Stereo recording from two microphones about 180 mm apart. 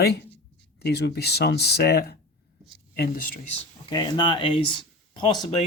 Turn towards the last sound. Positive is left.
turn(degrees=25)  # may be behind; listen again after turning